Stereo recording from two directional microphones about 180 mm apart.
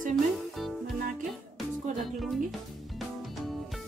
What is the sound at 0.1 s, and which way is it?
Music, centre (ahead or behind).